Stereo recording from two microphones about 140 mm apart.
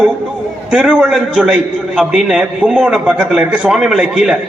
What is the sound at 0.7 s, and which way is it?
A man's voice, 5° right (ahead or behind).